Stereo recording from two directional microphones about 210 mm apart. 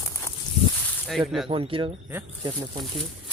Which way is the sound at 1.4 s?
25° right (ahead or behind).